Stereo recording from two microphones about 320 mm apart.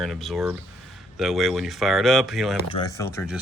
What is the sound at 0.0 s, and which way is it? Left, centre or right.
Speech, centre.